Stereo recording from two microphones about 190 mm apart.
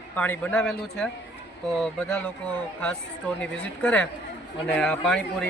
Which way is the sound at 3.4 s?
5° left (ahead or behind).